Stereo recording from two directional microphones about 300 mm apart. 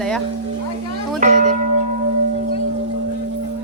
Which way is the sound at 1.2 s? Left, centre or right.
Right.